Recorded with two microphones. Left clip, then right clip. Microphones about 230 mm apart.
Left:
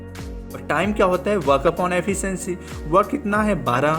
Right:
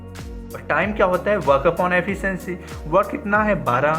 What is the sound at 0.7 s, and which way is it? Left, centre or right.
Speech, left.